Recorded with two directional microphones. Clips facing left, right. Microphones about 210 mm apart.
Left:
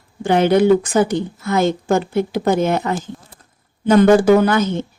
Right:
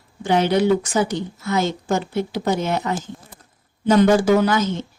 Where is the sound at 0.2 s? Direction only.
55° left (ahead or behind).